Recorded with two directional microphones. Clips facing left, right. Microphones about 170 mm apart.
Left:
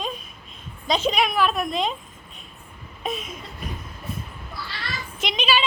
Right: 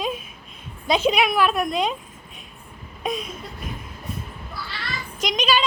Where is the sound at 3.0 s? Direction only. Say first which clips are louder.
Right 2 dB; 5° left (ahead or behind).